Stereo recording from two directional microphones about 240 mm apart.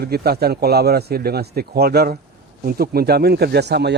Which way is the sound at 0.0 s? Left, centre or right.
Right.